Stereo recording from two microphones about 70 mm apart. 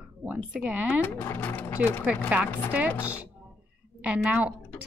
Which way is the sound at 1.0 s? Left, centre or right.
Left.